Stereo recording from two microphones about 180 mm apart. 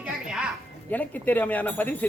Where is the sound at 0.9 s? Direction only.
10° left (ahead or behind).